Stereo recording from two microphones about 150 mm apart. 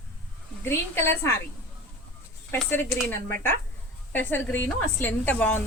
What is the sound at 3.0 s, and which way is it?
A woman's voice, 15° left (ahead or behind).